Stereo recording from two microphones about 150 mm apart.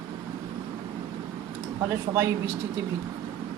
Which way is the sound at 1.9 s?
20° right (ahead or behind).